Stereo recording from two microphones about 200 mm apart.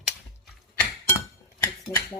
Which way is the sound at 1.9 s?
15° left (ahead or behind).